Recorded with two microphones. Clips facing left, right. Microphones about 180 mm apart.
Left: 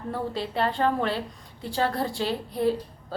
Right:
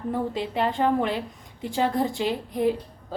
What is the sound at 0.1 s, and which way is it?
A woman's voice, 15° right (ahead or behind).